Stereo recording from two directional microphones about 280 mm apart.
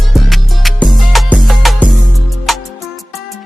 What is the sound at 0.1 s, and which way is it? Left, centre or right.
Music, centre.